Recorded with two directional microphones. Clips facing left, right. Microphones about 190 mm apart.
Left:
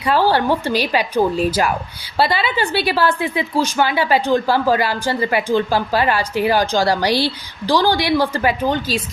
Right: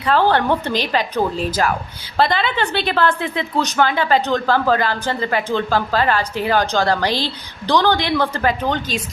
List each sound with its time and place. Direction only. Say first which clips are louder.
0.0 s a woman's voice: even; 10° left (ahead or behind)